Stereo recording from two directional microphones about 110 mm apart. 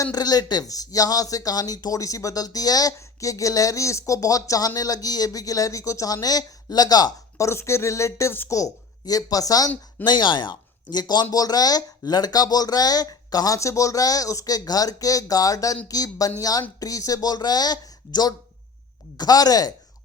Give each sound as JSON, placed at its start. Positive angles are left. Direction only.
{"t": 0.0, "sound": "speech", "side_deg": 35}